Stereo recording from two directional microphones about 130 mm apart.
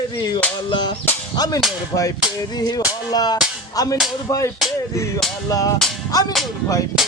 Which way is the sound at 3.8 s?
30° left (ahead or behind).